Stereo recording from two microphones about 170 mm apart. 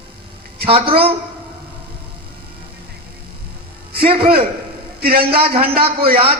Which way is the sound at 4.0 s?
35° right (ahead or behind).